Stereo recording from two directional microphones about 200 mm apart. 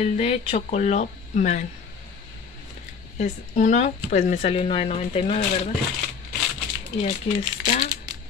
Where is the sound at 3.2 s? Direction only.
35° left (ahead or behind).